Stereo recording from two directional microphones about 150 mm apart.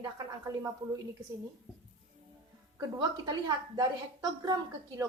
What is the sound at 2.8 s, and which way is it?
A woman's voice, 25° right (ahead or behind).